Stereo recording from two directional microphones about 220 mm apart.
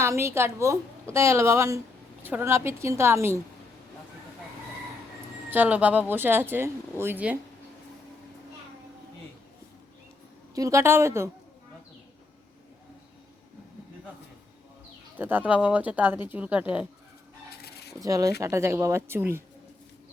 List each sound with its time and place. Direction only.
0.0 s speech: 10° right (ahead or behind)
5.5 s speech: 10° right (ahead or behind)
10.5 s speech: 15° right (ahead or behind)
15.1 s speech: 10° right (ahead or behind)
17.6 s a sound: 45° left (ahead or behind)
18.0 s speech: 15° right (ahead or behind)